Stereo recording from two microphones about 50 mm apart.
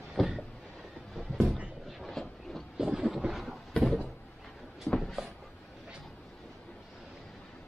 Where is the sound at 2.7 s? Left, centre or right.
Centre.